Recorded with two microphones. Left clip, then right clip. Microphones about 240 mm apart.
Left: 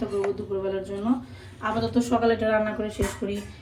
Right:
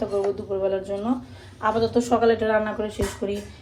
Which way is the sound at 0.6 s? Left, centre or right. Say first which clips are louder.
Right 4 dB; centre.